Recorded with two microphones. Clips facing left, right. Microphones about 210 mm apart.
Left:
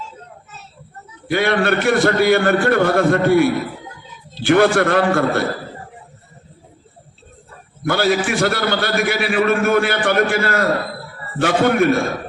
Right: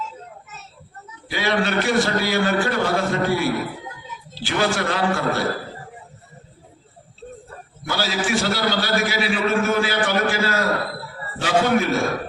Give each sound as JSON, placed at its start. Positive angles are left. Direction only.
{"t": 1.3, "sound": "a man's voice", "side_deg": 55}
{"t": 7.9, "sound": "a man's voice", "side_deg": 55}